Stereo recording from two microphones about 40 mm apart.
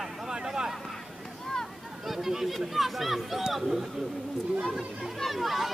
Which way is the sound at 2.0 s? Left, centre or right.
Centre.